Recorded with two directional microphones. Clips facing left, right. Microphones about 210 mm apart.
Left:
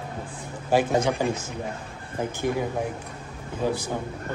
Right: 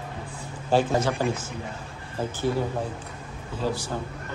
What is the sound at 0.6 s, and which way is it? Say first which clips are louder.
Speech: left 1 dB; 15° left (ahead or behind).